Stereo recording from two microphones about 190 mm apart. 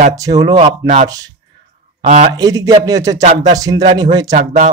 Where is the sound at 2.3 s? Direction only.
20° right (ahead or behind).